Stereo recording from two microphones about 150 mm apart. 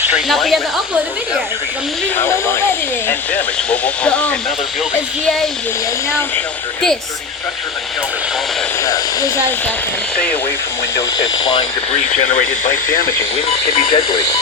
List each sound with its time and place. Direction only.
0.3 s speech: centre (ahead or behind)
2.1 s speech: 15° left (ahead or behind)
8.8 s speech: 20° left (ahead or behind)
10.9 s speech: 30° left (ahead or behind)
11.9 s speech: 45° left (ahead or behind)